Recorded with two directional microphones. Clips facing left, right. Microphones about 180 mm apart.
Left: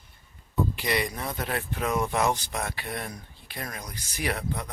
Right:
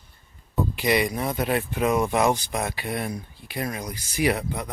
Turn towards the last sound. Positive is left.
turn(degrees=-15)  # may be behind; listen again after turning